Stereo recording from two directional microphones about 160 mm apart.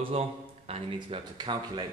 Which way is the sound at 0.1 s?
40° right (ahead or behind).